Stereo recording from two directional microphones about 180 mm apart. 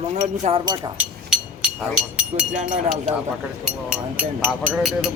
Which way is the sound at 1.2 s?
5° right (ahead or behind).